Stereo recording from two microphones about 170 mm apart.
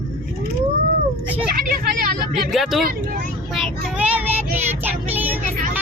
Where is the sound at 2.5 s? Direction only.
Centre (ahead or behind).